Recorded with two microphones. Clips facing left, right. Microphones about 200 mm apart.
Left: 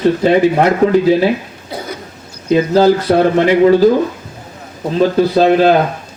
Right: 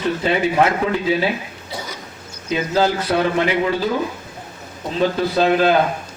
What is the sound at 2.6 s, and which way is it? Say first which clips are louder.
A man's voice: left 8 dB; 40° left (ahead or behind).